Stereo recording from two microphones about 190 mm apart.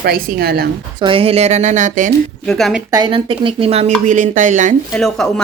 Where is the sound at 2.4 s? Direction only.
Centre (ahead or behind).